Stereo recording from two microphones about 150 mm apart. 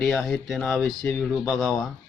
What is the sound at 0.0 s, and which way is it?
Speech, centre (ahead or behind).